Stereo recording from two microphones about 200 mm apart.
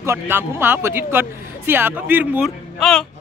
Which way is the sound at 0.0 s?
10° right (ahead or behind).